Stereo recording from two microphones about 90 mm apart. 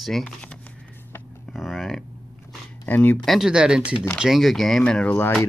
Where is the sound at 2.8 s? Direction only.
20° left (ahead or behind).